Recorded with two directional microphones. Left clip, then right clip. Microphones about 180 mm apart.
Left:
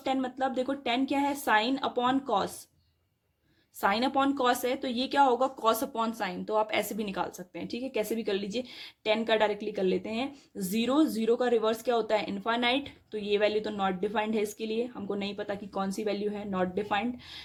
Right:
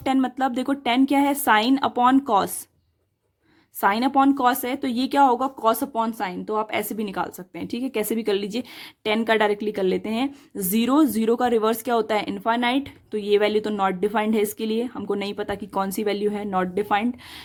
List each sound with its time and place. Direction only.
0.0 s speech: 45° right (ahead or behind)
3.8 s speech: 40° right (ahead or behind)